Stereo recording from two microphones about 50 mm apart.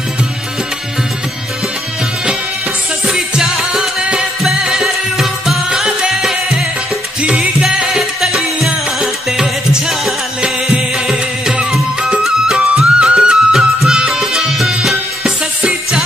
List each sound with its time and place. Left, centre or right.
3.1 s music: centre
7.2 s music: right
11.7 s music: centre